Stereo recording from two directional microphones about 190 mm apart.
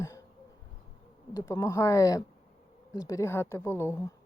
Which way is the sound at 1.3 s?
15° left (ahead or behind).